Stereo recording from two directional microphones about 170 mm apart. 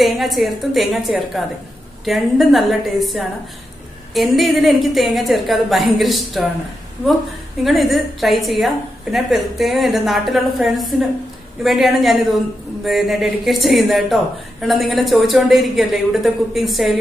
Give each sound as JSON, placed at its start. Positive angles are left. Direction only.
{"t": 0.0, "sound": "speech", "side_deg": 0}
{"t": 7.6, "sound": "speech", "side_deg": 0}